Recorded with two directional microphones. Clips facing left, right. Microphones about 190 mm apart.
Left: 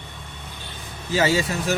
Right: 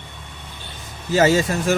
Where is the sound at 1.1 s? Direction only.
45° right (ahead or behind).